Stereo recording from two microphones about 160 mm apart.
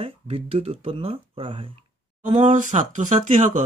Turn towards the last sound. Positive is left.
turn(degrees=-50)  # may be behind; listen again after turning